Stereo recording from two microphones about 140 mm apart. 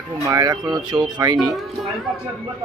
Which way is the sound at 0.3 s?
25° right (ahead or behind).